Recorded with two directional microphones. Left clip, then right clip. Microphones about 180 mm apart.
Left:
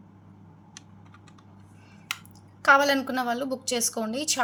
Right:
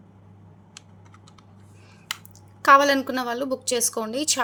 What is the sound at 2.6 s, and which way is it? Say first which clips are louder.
Speech: right 4 dB; 25° right (ahead or behind).